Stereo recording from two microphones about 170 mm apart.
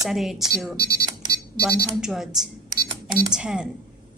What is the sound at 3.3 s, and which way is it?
Speech, 5° right (ahead or behind).